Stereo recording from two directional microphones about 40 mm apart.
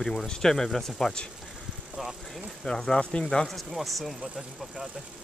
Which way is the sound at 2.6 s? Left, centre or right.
Centre.